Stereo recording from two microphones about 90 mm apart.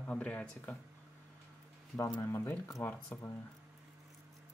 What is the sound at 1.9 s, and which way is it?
Speech, 30° left (ahead or behind).